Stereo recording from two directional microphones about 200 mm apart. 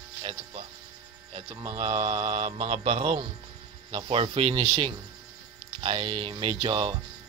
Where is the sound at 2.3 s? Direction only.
35° right (ahead or behind).